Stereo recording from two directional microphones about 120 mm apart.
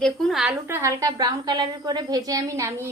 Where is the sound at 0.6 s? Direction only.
20° right (ahead or behind).